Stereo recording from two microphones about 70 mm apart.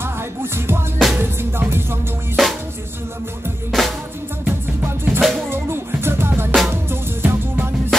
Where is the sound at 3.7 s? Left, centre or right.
Centre.